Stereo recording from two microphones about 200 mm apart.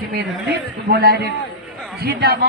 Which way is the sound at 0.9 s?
50° right (ahead or behind).